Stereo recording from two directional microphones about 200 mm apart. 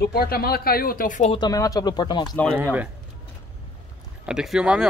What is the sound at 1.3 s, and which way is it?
A man's voice, 20° left (ahead or behind).